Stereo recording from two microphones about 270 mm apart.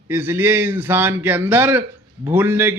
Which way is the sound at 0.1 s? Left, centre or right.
Centre.